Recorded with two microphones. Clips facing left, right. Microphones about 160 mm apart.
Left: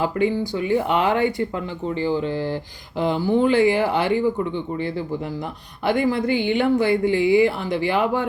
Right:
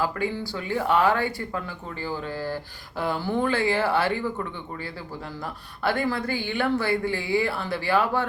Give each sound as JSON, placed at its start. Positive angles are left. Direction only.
{"t": 0.0, "sound": "speech", "side_deg": 20}